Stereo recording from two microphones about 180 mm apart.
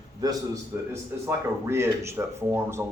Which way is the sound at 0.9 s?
15° right (ahead or behind).